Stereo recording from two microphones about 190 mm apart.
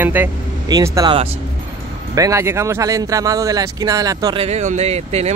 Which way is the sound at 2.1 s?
15° right (ahead or behind).